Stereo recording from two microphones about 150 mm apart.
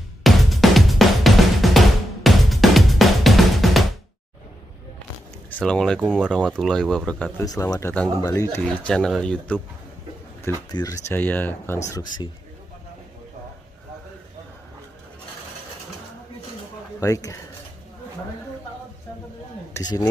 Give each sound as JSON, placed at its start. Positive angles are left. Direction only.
{"t": 0.2, "sound": "music", "side_deg": 0}
{"t": 5.5, "sound": "speech", "side_deg": 5}
{"t": 7.4, "sound": "speech", "side_deg": 25}
{"t": 10.7, "sound": "speech", "side_deg": 25}
{"t": 17.0, "sound": "speech", "side_deg": 20}